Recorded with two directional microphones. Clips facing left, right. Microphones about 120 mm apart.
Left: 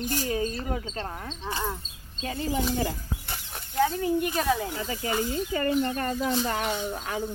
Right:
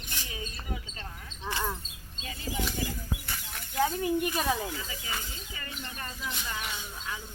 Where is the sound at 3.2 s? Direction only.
30° left (ahead or behind).